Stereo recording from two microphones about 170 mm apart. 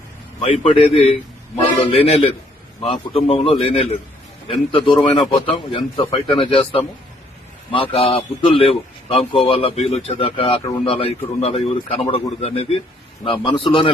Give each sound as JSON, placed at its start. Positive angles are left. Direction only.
{"t": 0.4, "sound": "a man's voice", "side_deg": 35}